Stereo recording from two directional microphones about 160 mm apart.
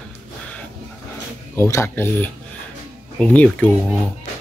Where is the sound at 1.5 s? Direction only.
15° left (ahead or behind).